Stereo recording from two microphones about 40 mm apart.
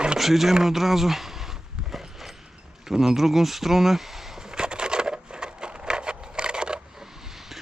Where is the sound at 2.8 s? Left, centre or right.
Centre.